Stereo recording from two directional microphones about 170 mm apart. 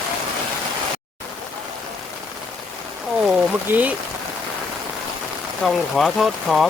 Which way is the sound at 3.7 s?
10° right (ahead or behind).